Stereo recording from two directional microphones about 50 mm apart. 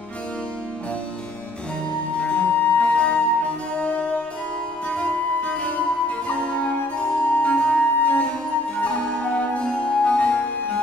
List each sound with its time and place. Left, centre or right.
2.2 s music: left